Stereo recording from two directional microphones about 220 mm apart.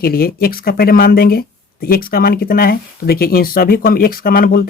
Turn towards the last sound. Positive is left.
turn(degrees=40)  # may be behind; listen again after turning